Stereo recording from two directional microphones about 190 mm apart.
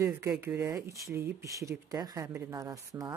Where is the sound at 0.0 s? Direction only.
15° right (ahead or behind).